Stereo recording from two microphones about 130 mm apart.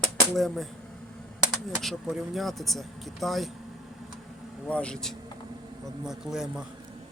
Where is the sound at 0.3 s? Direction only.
Centre (ahead or behind).